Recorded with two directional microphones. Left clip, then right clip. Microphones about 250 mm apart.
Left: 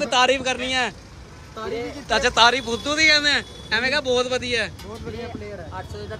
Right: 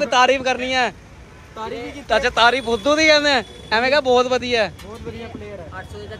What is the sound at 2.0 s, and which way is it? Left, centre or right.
Speech, centre.